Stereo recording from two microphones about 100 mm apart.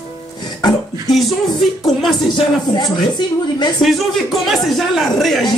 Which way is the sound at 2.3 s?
50° left (ahead or behind).